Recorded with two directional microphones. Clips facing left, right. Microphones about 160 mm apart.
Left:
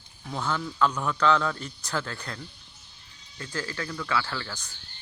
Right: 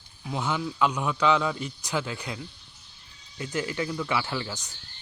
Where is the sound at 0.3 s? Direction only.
10° right (ahead or behind).